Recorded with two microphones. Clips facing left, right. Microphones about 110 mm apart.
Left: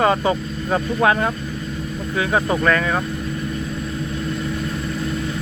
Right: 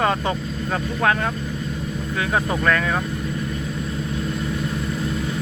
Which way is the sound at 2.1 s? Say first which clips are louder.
Left 3 dB; 5° left (ahead or behind).